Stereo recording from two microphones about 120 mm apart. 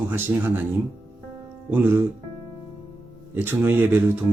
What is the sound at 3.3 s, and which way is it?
Speech, 15° right (ahead or behind).